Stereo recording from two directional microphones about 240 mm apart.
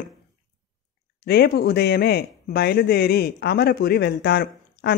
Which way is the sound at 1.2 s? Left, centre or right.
Left.